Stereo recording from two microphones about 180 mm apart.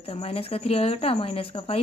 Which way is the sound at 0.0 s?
35° left (ahead or behind).